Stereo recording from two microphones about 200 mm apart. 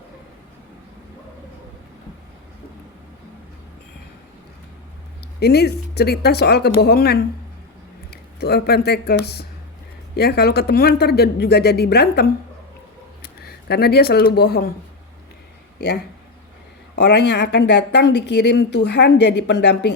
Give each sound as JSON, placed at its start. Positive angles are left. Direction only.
{"t": 5.4, "sound": "speech", "side_deg": 55}
{"t": 16.9, "sound": "speech", "side_deg": 60}